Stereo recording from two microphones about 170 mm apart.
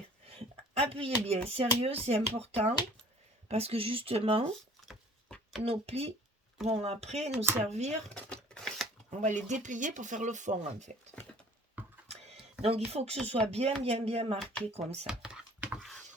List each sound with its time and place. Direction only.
0.3 s speech: 35° right (ahead or behind)
3.5 s speech: 35° right (ahead or behind)
4.9 s a sound: centre (ahead or behind)
5.6 s speech: 35° right (ahead or behind)
7.3 s speech: 10° right (ahead or behind)
7.7 s speech: 40° right (ahead or behind)
8.1 s typewriter: 5° left (ahead or behind)
9.0 s speech: 45° right (ahead or behind)
12.6 s speech: 35° right (ahead or behind)
15.0 s a sound: 5° right (ahead or behind)